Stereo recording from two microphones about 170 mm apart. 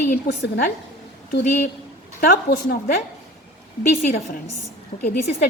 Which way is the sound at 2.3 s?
65° left (ahead or behind).